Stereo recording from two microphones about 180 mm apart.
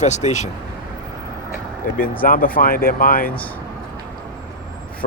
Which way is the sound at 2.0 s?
50° left (ahead or behind).